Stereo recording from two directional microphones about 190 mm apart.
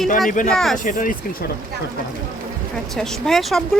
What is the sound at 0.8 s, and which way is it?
Speech, 45° left (ahead or behind).